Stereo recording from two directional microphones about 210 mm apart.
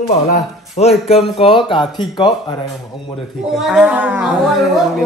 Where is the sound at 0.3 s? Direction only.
30° left (ahead or behind).